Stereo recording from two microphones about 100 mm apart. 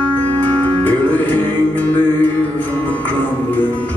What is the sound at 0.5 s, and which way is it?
Music, 15° left (ahead or behind).